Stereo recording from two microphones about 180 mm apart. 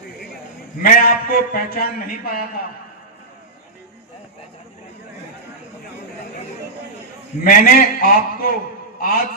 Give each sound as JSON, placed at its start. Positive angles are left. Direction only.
{"t": 0.8, "sound": "a man's voice", "side_deg": 55}
{"t": 7.4, "sound": "a man's voice", "side_deg": 55}